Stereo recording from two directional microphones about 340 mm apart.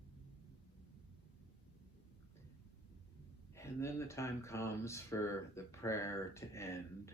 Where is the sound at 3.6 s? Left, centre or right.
Centre.